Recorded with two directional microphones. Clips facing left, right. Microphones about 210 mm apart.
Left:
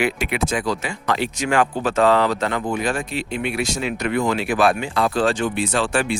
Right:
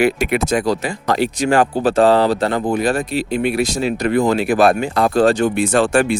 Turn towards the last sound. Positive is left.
turn(degrees=-45)  # may be behind; listen again after turning